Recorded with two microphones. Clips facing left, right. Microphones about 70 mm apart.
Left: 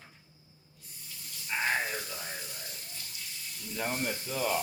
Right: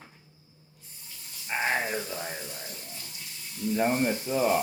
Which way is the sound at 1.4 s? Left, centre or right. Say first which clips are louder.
Right 3 dB; right.